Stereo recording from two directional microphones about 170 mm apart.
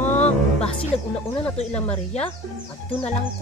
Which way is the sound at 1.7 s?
5° left (ahead or behind).